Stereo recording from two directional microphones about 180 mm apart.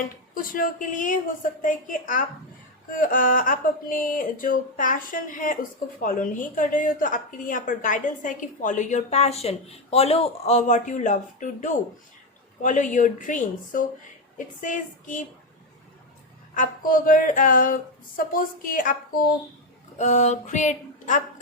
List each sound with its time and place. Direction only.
0.3 s a woman's voice: 50° left (ahead or behind)
16.6 s a woman's voice: 50° left (ahead or behind)
20.0 s a sound: 40° left (ahead or behind)